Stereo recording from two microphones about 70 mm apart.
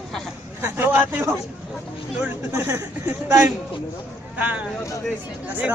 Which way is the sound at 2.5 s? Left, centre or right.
Right.